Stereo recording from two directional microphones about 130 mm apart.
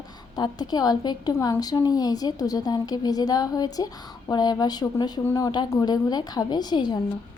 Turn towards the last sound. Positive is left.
turn(degrees=35)  # may be behind; listen again after turning